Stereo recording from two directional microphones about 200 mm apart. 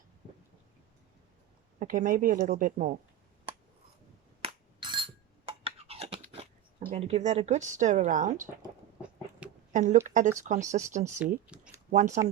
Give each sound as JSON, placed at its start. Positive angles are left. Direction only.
{"t": 1.8, "sound": "speech", "side_deg": -40}
{"t": 4.4, "sound": "a sound", "side_deg": -25}
{"t": 6.9, "sound": "speech", "side_deg": -35}
{"t": 9.4, "sound": "a sound", "side_deg": -5}
{"t": 9.7, "sound": "speech", "side_deg": -40}
{"t": 11.2, "sound": "speech", "side_deg": -5}
{"t": 11.9, "sound": "speech", "side_deg": -35}